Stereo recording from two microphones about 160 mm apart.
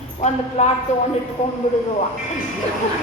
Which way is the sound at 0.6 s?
45° left (ahead or behind).